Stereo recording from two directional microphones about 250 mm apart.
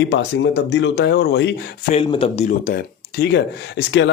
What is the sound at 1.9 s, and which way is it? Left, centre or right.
Speech, left.